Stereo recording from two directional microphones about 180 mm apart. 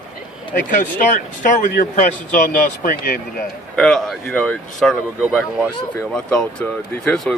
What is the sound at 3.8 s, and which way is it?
Speech, centre (ahead or behind).